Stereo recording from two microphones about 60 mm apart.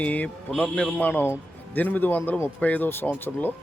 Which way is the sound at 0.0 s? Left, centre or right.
Left.